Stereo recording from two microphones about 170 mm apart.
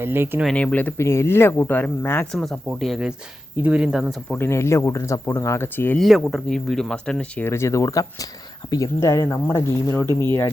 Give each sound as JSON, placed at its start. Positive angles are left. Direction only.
{"t": 0.0, "sound": "speech", "side_deg": -10}
{"t": 0.4, "sound": "speech", "side_deg": 5}
{"t": 2.4, "sound": "speech", "side_deg": 0}
{"t": 4.4, "sound": "speech", "side_deg": 15}
{"t": 6.0, "sound": "speech", "side_deg": 0}
{"t": 10.1, "sound": "speech", "side_deg": -20}